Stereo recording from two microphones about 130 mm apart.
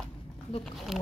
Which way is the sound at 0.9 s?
Centre (ahead or behind).